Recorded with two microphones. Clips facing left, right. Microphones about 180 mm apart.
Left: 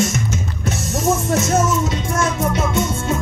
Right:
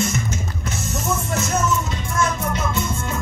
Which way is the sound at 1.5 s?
90° left.